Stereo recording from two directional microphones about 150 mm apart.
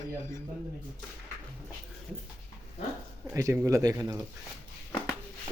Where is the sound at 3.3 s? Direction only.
20° right (ahead or behind).